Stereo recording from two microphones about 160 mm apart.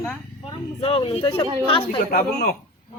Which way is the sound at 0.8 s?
35° left (ahead or behind).